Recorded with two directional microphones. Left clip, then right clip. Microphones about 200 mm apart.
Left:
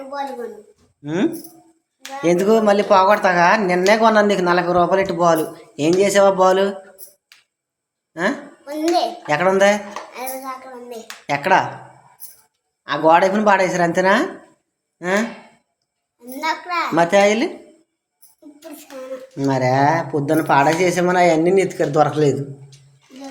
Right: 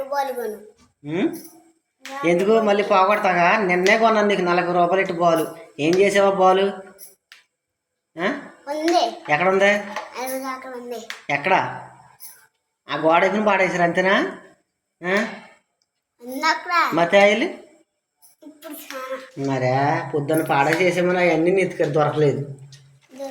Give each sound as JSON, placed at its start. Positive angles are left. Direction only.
{"t": 1.0, "sound": "speech", "side_deg": 25}
{"t": 8.7, "sound": "a child's voice", "side_deg": 5}
{"t": 9.2, "sound": "speech", "side_deg": 25}
{"t": 10.1, "sound": "a child's voice", "side_deg": 0}
{"t": 11.3, "sound": "speech", "side_deg": 20}
{"t": 12.8, "sound": "speech", "side_deg": 20}
{"t": 16.4, "sound": "a child's voice", "side_deg": -5}
{"t": 16.9, "sound": "speech", "side_deg": 20}
{"t": 19.4, "sound": "speech", "side_deg": 30}